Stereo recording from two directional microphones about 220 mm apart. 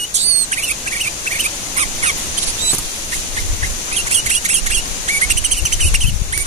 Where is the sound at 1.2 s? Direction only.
30° right (ahead or behind).